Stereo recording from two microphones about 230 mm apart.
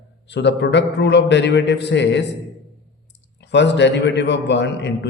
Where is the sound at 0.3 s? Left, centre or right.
Left.